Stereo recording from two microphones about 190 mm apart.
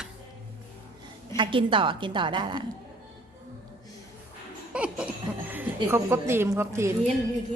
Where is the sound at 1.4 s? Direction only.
25° right (ahead or behind).